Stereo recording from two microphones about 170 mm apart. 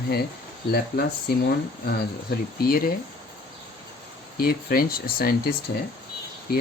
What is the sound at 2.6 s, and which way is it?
Speech, 60° left (ahead or behind).